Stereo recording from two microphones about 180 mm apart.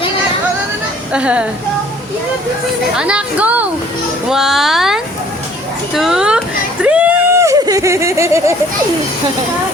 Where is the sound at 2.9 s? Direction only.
5° right (ahead or behind).